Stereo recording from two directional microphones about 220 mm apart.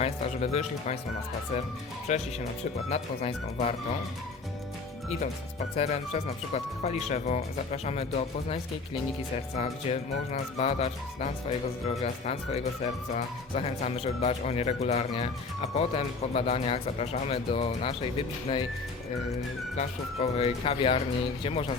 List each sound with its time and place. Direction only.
0.0 s speech: 30° left (ahead or behind)
2.1 s speech: 30° left (ahead or behind)
5.7 s speech: 30° left (ahead or behind)
9.6 s speech: 30° left (ahead or behind)
19.7 s speech: 30° left (ahead or behind)